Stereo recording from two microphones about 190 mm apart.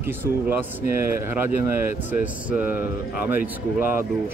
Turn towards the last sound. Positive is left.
turn(degrees=-10)  # may be behind; listen again after turning